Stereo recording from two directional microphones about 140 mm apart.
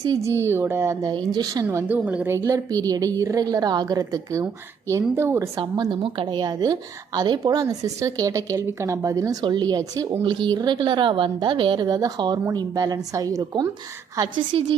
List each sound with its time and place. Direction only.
0.2 s a woman's voice: 20° right (ahead or behind)
1.1 s a woman's voice: 30° right (ahead or behind)
1.6 s a woman's voice: 10° right (ahead or behind)
2.4 s a woman's voice: 25° right (ahead or behind)
5.5 s a woman's voice: 30° right (ahead or behind)
14.5 s speech: 40° right (ahead or behind)